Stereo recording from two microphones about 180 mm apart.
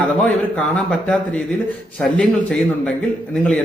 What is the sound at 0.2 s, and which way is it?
A man's voice, 5° left (ahead or behind).